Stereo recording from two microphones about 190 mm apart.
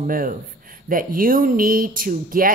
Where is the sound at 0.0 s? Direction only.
45° right (ahead or behind).